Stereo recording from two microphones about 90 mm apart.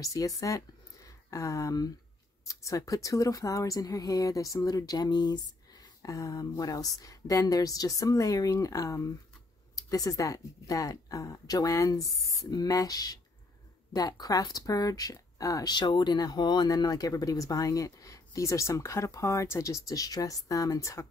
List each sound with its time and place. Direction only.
0.0 s speech: 40° left (ahead or behind)